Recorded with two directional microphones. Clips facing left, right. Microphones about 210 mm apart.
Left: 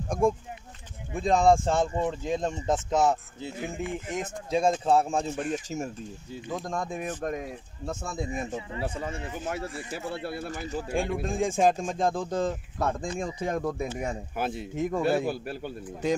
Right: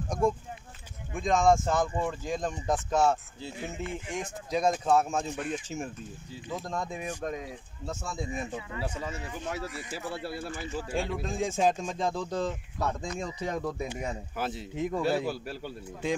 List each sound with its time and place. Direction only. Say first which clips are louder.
0.2 s speech: left 3 dB; 50° left (ahead or behind)
1.1 s speech: left 2 dB; 35° left (ahead or behind)
5.3 s speech: left 3 dB; 45° left (ahead or behind)
10.2 s speech: left 2 dB; 55° left (ahead or behind)